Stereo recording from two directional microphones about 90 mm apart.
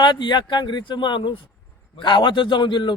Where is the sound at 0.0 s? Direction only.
55° left (ahead or behind).